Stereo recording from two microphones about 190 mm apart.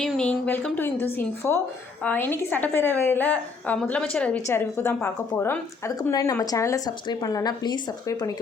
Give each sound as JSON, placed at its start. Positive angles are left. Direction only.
{"t": 0.0, "sound": "a woman's voice", "side_deg": 5}